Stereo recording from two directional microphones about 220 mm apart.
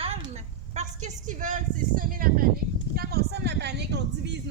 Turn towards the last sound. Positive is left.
turn(degrees=-50)  # may be behind; listen again after turning